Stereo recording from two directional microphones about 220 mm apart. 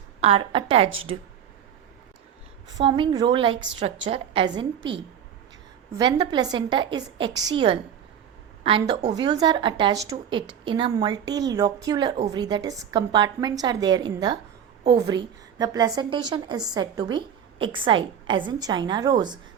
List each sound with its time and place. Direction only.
0.2 s a woman's voice: 25° right (ahead or behind)
2.7 s a woman's voice: 20° right (ahead or behind)
6.0 s a woman's voice: 20° right (ahead or behind)
15.5 s a woman's voice: 15° right (ahead or behind)